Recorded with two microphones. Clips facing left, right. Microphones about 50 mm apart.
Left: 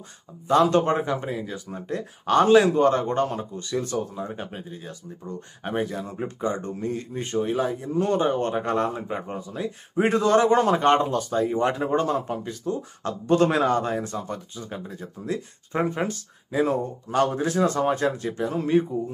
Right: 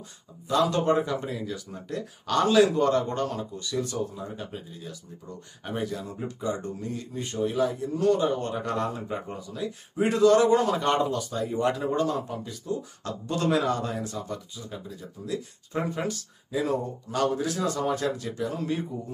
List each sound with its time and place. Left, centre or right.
0.5 s speech: left